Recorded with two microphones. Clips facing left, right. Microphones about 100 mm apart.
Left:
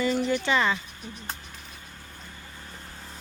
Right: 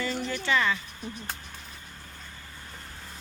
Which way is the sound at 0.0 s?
15° left (ahead or behind).